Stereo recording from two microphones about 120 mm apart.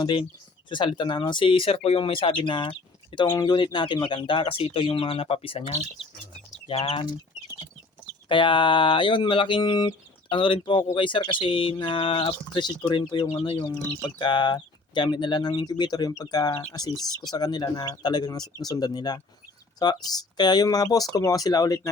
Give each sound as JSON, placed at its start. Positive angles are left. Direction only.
{"t": 0.0, "sound": "speech", "side_deg": 40}
{"t": 8.3, "sound": "speech", "side_deg": 45}